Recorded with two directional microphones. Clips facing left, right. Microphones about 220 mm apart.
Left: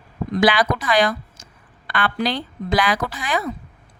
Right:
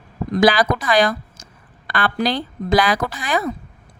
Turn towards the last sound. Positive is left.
turn(degrees=-40)  # may be behind; listen again after turning